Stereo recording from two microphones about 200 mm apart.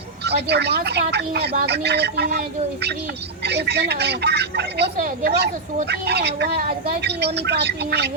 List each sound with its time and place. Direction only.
0.3 s speech: 55° right (ahead or behind)
4.9 s speech: 45° right (ahead or behind)